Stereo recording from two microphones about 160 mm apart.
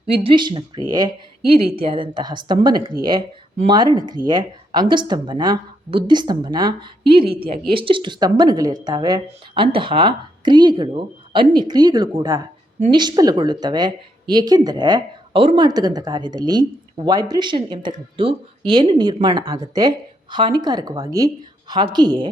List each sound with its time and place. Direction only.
0.2 s speech: 30° right (ahead or behind)
1.5 s a woman's voice: 35° right (ahead or behind)